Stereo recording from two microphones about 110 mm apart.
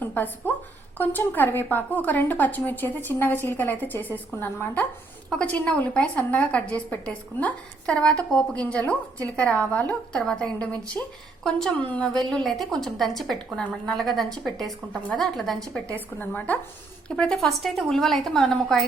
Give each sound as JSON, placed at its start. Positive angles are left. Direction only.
{"t": 0.0, "sound": "a woman's voice", "side_deg": 15}
{"t": 16.0, "sound": "a woman's voice", "side_deg": 20}
{"t": 17.1, "sound": "a woman's voice", "side_deg": 5}